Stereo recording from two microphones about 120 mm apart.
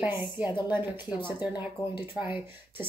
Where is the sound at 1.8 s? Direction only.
10° left (ahead or behind).